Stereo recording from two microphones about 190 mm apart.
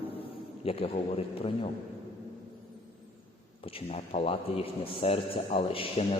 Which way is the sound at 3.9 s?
30° left (ahead or behind).